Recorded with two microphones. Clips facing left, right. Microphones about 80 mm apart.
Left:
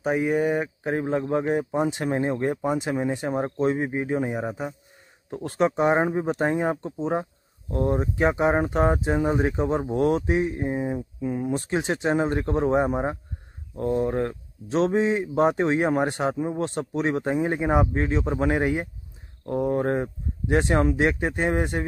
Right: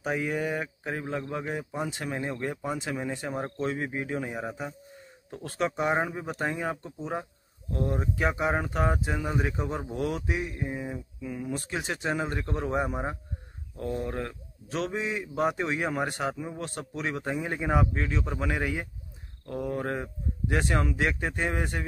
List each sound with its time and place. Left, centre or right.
0.0 s speech: left